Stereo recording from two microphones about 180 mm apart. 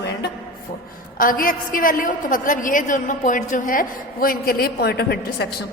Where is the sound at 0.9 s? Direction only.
50° left (ahead or behind).